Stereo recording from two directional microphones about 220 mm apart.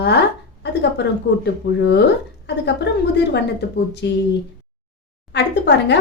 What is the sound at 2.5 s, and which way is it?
A woman's voice, 50° left (ahead or behind).